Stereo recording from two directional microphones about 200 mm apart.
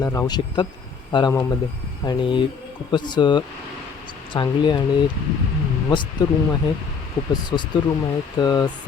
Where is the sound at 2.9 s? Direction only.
20° left (ahead or behind).